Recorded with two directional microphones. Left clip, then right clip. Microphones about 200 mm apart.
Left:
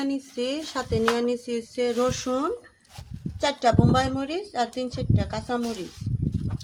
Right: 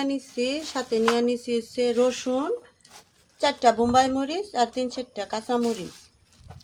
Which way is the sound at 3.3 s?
15° right (ahead or behind).